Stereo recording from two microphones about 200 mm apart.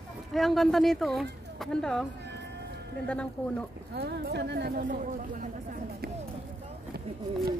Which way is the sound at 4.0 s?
55° right (ahead or behind).